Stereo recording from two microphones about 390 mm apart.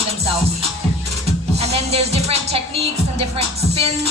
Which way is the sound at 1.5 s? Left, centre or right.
Centre.